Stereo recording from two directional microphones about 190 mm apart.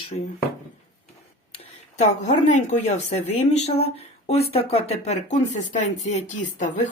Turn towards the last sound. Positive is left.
turn(degrees=40)  # may be behind; listen again after turning